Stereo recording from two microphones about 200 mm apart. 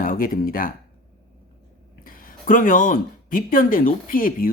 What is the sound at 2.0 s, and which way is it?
Speech, 45° left (ahead or behind).